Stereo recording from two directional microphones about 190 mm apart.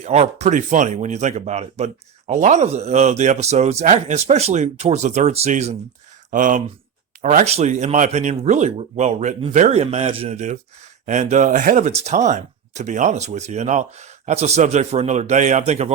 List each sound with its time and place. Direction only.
0.0 s speech: 35° right (ahead or behind)